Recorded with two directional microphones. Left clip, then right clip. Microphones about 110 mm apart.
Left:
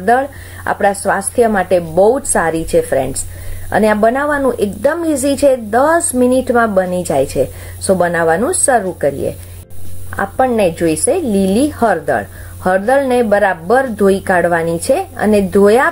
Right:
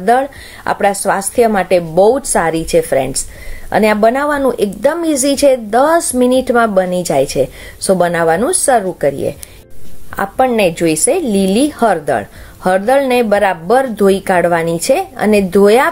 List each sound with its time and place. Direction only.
0.0 s a woman's voice: 15° right (ahead or behind)
2.0 s a woman's voice: 15° right (ahead or behind)
5.0 s speech: 15° right (ahead or behind)
7.0 s speech: 10° right (ahead or behind)
7.3 s a woman's voice: 20° right (ahead or behind)
10.1 s a woman's voice: 25° right (ahead or behind)